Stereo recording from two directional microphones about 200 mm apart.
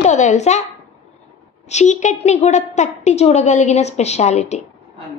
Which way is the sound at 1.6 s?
35° left (ahead or behind).